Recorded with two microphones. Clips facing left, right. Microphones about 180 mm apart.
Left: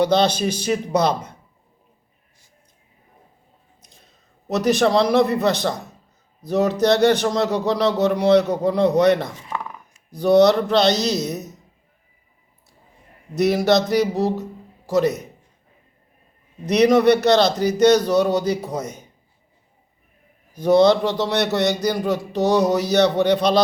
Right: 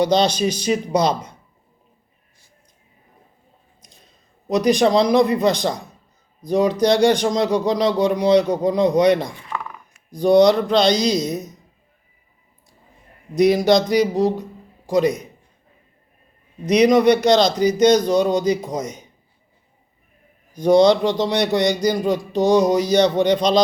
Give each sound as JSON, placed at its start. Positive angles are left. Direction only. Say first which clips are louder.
{"t": 0.6, "sound": "speech", "louder": "even", "side_deg": 55}
{"t": 4.4, "sound": "speech", "louder": "right 2 dB", "side_deg": -15}
{"t": 13.3, "sound": "a man's voice", "louder": "right 2 dB", "side_deg": -15}
{"t": 16.6, "sound": "speech", "louder": "right 1 dB", "side_deg": -10}
{"t": 17.9, "sound": "speech", "louder": "right 1 dB", "side_deg": 10}
{"t": 20.7, "sound": "speech", "louder": "right 1 dB", "side_deg": -15}